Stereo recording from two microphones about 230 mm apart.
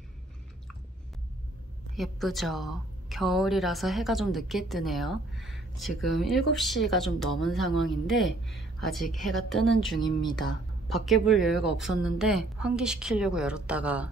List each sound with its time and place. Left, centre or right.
2.0 s a woman's voice: centre
9.9 s speech: centre
10.9 s a woman's voice: centre